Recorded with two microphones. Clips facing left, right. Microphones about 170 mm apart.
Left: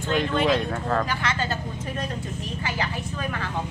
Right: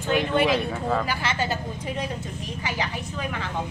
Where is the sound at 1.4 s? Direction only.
15° right (ahead or behind).